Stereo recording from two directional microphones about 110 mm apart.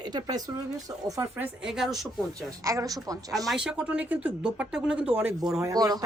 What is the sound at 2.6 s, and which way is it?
Speech, 30° right (ahead or behind).